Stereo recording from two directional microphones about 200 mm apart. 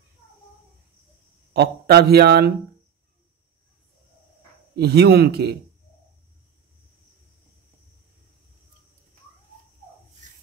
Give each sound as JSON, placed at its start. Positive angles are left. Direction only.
{"t": 1.5, "sound": "a man's voice", "side_deg": -55}
{"t": 4.7, "sound": "a man's voice", "side_deg": -55}